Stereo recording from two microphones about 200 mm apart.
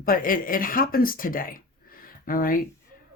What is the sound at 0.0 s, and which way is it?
Speech, 45° left (ahead or behind).